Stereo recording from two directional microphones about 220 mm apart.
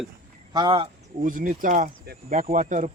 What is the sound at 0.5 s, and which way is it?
Speech, 20° right (ahead or behind).